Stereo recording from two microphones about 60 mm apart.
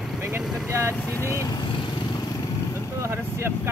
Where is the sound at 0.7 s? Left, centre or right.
Right.